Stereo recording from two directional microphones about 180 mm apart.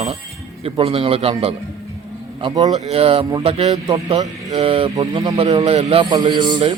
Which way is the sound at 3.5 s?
30° right (ahead or behind).